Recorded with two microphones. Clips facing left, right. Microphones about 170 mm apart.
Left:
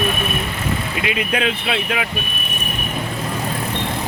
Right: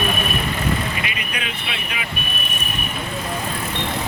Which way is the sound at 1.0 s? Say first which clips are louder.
Left 9 dB; 90° left.